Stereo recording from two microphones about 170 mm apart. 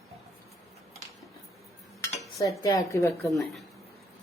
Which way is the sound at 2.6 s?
20° left (ahead or behind).